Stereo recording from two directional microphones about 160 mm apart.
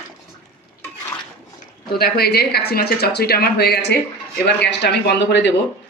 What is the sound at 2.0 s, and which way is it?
Speech, 80° left.